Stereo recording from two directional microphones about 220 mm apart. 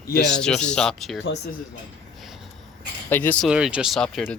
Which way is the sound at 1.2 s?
50° left (ahead or behind).